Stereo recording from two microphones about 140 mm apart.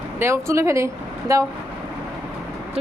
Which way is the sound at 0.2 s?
20° right (ahead or behind).